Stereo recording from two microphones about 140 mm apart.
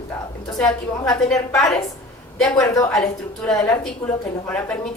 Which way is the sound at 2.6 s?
25° left (ahead or behind).